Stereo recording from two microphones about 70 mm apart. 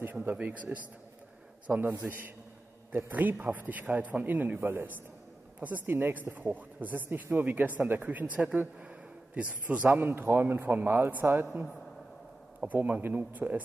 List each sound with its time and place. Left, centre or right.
0.0 s speech: right
12.5 s speech: right